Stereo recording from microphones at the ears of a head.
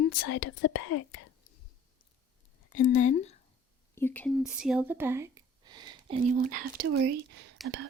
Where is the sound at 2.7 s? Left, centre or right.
Left.